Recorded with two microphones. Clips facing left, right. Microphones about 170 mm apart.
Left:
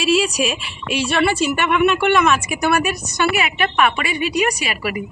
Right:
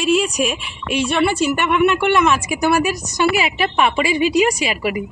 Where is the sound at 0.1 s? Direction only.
90° left.